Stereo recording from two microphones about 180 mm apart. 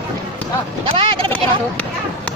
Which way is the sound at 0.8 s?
30° right (ahead or behind).